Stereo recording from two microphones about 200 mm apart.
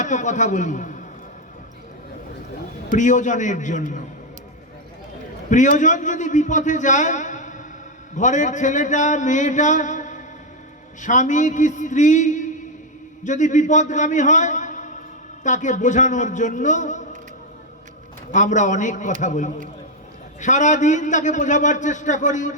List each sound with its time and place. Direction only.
0.0 s a man's voice: 40° left (ahead or behind)
2.9 s a man's voice: 40° left (ahead or behind)
5.5 s a man's voice: 40° left (ahead or behind)
18.3 s a man's voice: 40° left (ahead or behind)